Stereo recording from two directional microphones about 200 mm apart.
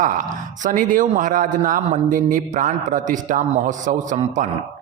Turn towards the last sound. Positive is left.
turn(degrees=-40)  # may be behind; listen again after turning